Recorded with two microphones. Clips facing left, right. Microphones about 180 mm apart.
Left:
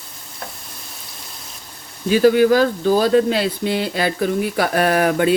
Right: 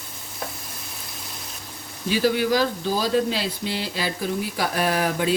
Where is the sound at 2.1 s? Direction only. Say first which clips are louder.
Left 8 dB; 50° left (ahead or behind).